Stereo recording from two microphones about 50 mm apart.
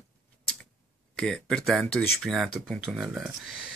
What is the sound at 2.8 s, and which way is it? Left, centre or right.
Speech, centre.